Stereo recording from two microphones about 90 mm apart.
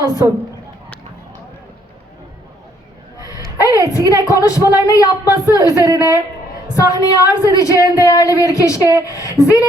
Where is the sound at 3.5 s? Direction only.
40° left (ahead or behind).